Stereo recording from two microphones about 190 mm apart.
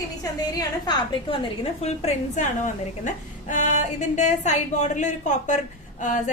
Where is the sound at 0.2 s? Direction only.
20° left (ahead or behind).